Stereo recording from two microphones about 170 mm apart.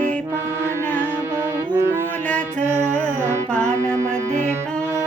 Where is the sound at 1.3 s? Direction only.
15° right (ahead or behind).